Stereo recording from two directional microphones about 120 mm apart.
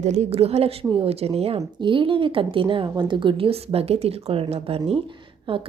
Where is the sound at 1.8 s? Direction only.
45° right (ahead or behind).